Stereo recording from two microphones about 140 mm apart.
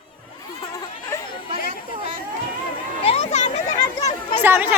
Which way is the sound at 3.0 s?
50° left (ahead or behind).